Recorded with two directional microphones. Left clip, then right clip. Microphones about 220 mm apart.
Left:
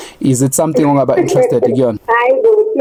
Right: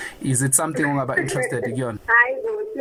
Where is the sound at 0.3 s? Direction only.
30° left (ahead or behind).